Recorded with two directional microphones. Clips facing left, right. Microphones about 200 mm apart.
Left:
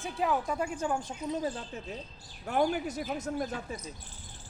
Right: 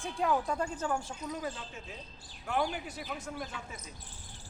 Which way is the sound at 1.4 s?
35° left (ahead or behind).